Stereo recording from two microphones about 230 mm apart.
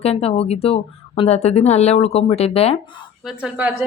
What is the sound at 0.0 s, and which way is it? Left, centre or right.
Speech, left.